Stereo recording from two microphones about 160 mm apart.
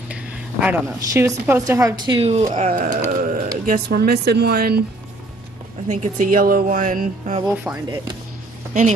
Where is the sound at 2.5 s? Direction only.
50° right (ahead or behind); by 4.7 s 75° right (ahead or behind).